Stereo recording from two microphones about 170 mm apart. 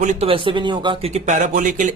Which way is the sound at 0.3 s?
30° right (ahead or behind).